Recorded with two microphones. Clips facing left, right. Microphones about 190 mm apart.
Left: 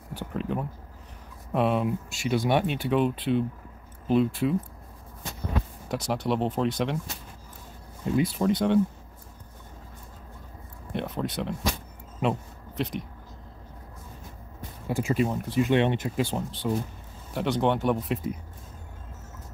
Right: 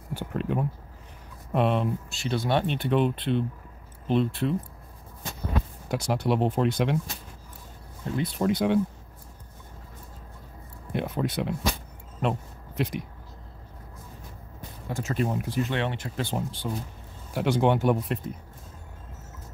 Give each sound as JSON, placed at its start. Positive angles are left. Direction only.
{"t": 0.1, "sound": "speech", "side_deg": 0}
{"t": 5.9, "sound": "speech", "side_deg": 0}
{"t": 8.4, "sound": "speech", "side_deg": 0}
{"t": 10.9, "sound": "speech", "side_deg": -5}
{"t": 12.2, "sound": "a sound", "side_deg": 0}
{"t": 14.9, "sound": "speech", "side_deg": 15}
{"t": 15.1, "sound": "speech", "side_deg": 0}
{"t": 15.6, "sound": "speech", "side_deg": 20}
{"t": 16.6, "sound": "speech", "side_deg": 5}